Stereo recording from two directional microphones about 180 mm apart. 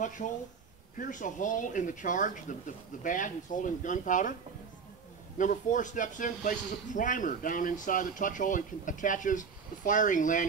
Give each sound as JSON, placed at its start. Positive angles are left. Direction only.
{"t": 0.9, "sound": "speech", "side_deg": 50}
{"t": 5.4, "sound": "speech", "side_deg": 45}